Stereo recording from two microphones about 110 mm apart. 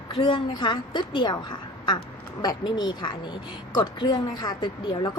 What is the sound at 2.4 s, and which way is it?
A woman's voice, 40° left (ahead or behind).